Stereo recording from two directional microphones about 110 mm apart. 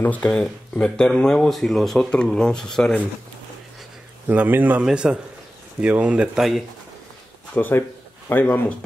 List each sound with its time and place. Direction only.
0.0 s speech: 15° left (ahead or behind)
4.3 s speech: 15° right (ahead or behind)
7.5 s speech: 15° left (ahead or behind)